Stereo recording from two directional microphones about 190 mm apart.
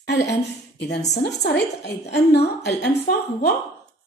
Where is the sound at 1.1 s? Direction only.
60° left (ahead or behind).